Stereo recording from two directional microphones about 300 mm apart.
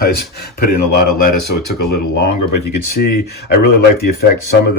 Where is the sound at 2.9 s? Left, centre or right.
Left.